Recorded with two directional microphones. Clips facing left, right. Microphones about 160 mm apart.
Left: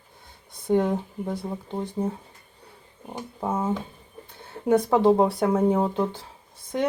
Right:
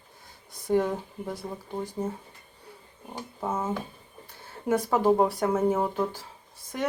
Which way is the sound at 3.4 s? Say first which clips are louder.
Left 3 dB; 15° left (ahead or behind).